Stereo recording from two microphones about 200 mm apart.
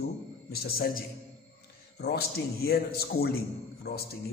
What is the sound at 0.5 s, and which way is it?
A man's voice, 50° left (ahead or behind).